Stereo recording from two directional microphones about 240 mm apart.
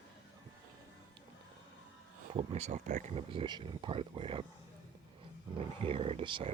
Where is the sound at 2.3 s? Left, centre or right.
Right.